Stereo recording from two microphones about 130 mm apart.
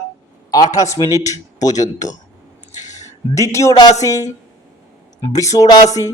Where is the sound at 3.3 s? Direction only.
25° left (ahead or behind).